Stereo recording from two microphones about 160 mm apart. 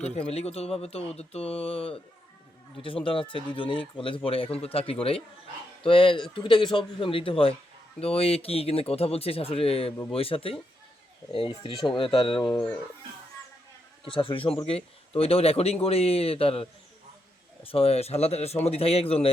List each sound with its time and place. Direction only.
0.0 s a man's voice: 40° left (ahead or behind)
14.0 s a man's voice: 35° left (ahead or behind)